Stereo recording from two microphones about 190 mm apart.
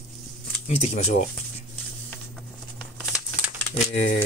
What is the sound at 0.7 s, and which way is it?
Speech, 35° left (ahead or behind).